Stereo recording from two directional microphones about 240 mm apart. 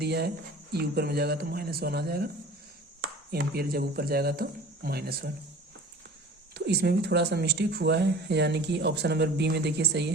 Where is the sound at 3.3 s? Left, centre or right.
Right.